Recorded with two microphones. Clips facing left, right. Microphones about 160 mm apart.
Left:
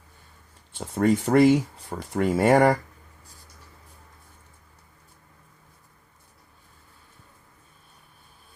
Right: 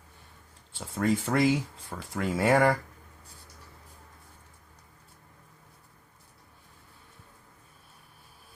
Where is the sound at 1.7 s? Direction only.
35° left (ahead or behind).